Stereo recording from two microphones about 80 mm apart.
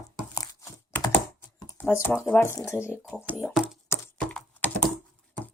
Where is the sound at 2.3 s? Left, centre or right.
Left.